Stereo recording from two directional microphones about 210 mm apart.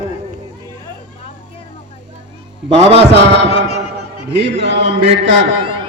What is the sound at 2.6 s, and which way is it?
Music, 30° right (ahead or behind).